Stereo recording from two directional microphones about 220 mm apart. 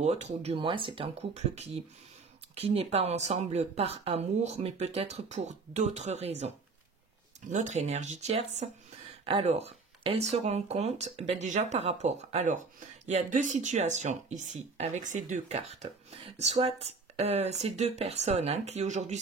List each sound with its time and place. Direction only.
0.0 s a woman's voice: 30° right (ahead or behind)
7.5 s a woman's voice: 30° right (ahead or behind)